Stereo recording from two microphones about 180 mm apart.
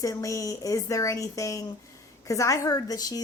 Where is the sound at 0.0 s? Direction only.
20° left (ahead or behind).